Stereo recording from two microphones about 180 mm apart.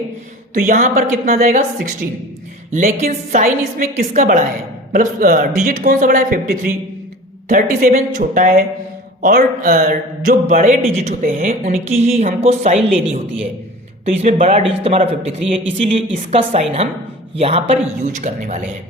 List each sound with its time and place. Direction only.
0.5 s speech: 45° right (ahead or behind)
11.9 s speech: 35° right (ahead or behind)